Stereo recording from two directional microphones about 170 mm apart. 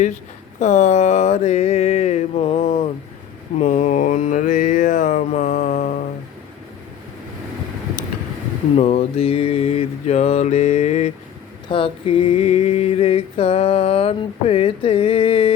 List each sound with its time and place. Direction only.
0.6 s mantra: 45° left (ahead or behind)
8.7 s mantra: 35° left (ahead or behind)